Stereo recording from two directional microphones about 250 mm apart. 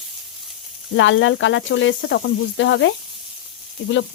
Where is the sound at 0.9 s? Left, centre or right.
Left.